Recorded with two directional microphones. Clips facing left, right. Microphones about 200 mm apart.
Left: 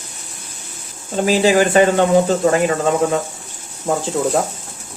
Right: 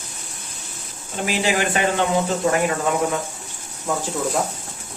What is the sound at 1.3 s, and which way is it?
Speech, 40° left (ahead or behind).